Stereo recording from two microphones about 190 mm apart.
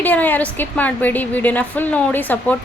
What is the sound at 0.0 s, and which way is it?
A woman's voice, 10° left (ahead or behind).